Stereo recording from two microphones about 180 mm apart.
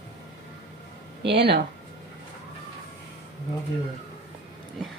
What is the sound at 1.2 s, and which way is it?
Speech, 65° right (ahead or behind).